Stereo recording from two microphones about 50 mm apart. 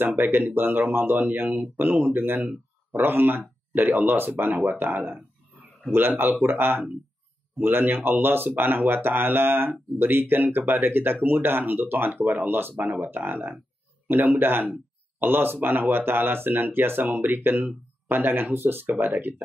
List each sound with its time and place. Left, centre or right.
0.2 s speech: right
12.7 s speech: right